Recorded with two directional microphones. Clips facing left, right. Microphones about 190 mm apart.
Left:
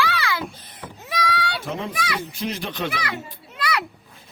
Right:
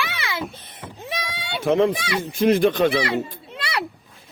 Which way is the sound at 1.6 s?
70° right (ahead or behind).